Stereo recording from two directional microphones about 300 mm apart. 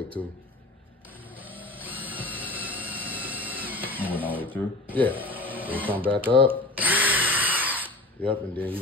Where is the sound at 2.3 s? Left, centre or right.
Centre.